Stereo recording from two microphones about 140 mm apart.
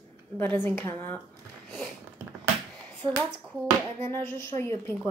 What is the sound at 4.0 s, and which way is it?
Speech, 15° left (ahead or behind).